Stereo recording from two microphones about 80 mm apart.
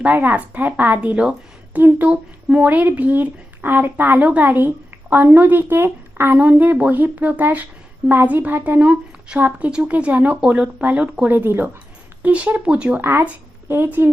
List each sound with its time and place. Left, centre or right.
0.0 s speech: right
13.0 s speech: right